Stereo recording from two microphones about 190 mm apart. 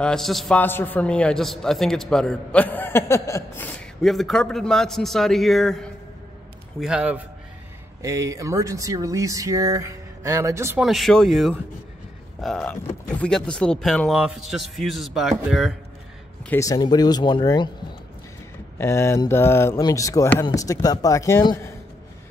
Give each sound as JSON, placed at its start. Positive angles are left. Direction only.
{"t": 0.0, "sound": "a man's voice", "side_deg": 0}
{"t": 8.0, "sound": "speech", "side_deg": -15}
{"t": 10.8, "sound": "a man's voice", "side_deg": 0}
{"t": 16.4, "sound": "speech", "side_deg": 15}
{"t": 18.8, "sound": "speech", "side_deg": 15}